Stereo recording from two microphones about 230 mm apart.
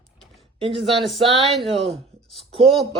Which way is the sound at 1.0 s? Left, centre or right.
Centre.